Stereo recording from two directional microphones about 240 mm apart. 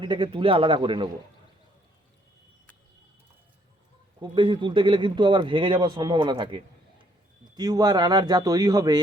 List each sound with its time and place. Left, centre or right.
0.0 s speech: centre
4.2 s speech: centre